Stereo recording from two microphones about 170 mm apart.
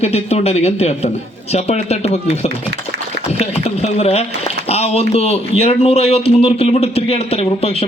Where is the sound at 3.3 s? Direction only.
40° left (ahead or behind).